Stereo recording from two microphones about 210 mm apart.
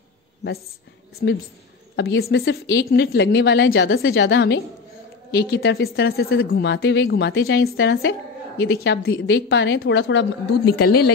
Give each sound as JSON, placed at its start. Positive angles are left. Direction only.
{"t": 1.2, "sound": "a woman's voice", "side_deg": 55}